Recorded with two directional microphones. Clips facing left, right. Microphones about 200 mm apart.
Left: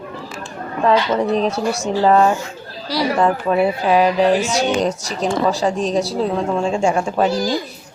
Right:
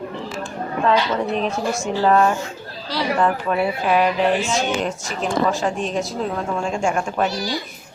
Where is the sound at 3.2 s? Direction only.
35° left (ahead or behind).